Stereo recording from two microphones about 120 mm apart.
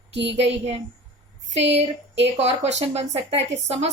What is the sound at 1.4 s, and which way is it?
A woman's voice, 70° right (ahead or behind).